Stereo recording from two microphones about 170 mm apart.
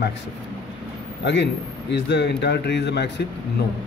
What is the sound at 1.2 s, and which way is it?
A man's voice, 90° left.